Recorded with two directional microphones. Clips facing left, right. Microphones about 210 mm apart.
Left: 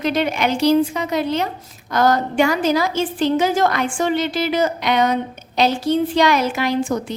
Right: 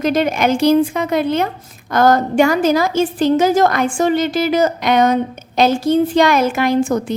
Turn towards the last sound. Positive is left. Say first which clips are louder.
# right 4 dB
turn(degrees=-45)  # may be behind; listen again after turning